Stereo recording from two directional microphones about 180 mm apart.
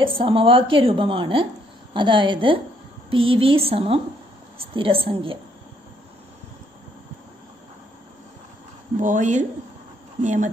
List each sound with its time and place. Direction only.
0.0 s a woman's voice: 30° right (ahead or behind)
9.0 s a woman's voice: 45° right (ahead or behind)